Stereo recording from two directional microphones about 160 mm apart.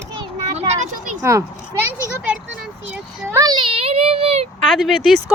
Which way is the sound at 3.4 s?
30° right (ahead or behind).